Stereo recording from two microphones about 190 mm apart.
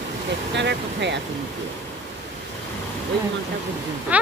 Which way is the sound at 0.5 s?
65° right (ahead or behind).